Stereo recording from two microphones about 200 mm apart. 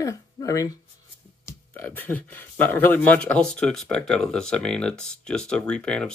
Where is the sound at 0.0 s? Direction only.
15° left (ahead or behind).